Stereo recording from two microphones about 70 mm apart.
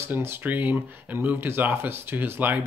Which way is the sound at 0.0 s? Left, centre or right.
Right.